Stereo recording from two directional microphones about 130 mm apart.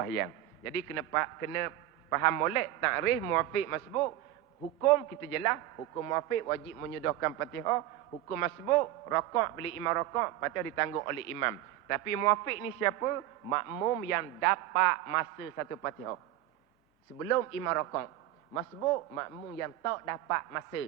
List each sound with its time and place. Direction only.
0.0 s a man's voice: 25° left (ahead or behind)
17.2 s a man's voice: 25° left (ahead or behind)